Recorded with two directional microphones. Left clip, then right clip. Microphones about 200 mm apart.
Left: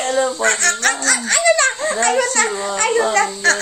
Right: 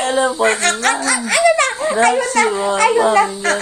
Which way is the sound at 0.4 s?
15° left (ahead or behind).